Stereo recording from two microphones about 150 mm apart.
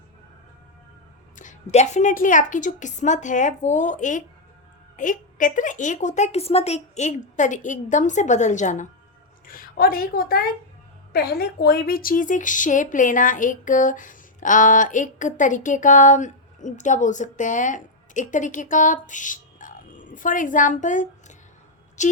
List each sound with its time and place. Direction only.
1.4 s a woman's voice: 55° left (ahead or behind)
9.5 s a woman's voice: 75° left (ahead or behind); by 22.1 s 55° left (ahead or behind)